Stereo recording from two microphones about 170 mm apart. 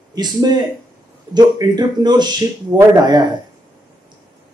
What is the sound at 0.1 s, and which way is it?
Speech, 25° right (ahead or behind).